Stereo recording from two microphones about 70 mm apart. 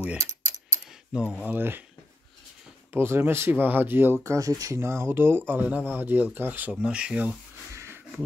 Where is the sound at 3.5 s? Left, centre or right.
Right.